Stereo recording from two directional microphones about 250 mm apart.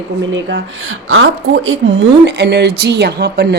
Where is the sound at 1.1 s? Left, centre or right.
Right.